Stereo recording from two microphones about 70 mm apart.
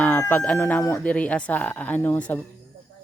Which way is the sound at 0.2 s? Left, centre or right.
Left.